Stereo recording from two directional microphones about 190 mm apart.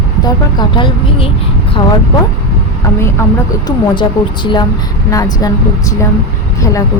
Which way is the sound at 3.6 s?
25° left (ahead or behind).